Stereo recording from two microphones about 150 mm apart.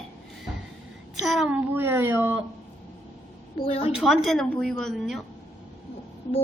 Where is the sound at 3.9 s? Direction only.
Centre (ahead or behind).